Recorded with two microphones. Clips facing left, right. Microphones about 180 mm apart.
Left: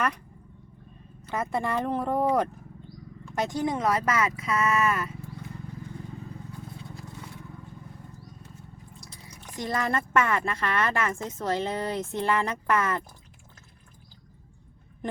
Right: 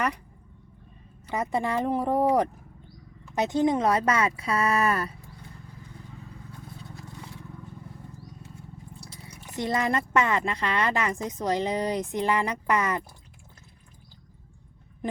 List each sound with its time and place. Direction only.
1.3 s a woman's voice: 15° right (ahead or behind); by 5.1 s 35° right (ahead or behind)
9.6 s a woman's voice: 20° right (ahead or behind)